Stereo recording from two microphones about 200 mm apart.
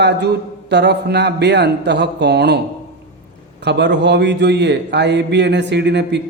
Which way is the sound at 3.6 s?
60° right (ahead or behind).